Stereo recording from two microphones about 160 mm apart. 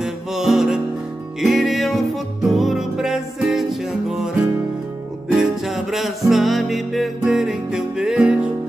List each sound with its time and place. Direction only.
0.0 s music: 5° right (ahead or behind)